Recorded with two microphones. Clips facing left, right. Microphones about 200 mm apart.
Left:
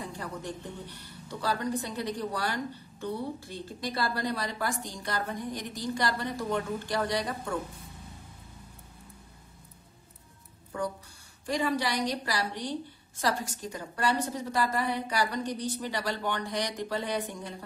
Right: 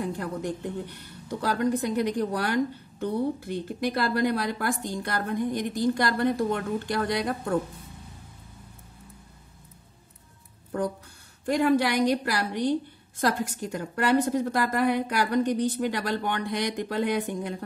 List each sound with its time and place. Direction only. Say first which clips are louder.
1.6 s a woman's voice: right 8 dB; 55° right (ahead or behind)
11.4 s a woman's voice: right 7 dB; 60° right (ahead or behind)